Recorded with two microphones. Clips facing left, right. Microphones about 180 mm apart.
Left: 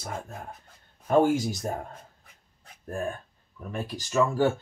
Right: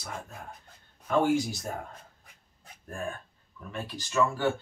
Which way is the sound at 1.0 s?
45° left (ahead or behind).